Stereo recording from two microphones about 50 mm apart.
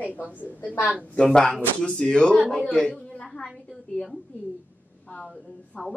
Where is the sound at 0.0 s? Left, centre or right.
Left.